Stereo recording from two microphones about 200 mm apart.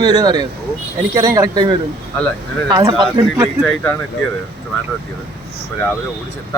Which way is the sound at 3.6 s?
5° left (ahead or behind).